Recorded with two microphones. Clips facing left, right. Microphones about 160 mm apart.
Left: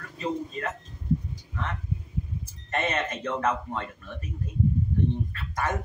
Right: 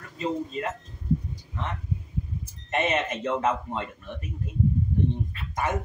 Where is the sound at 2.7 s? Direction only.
20° right (ahead or behind).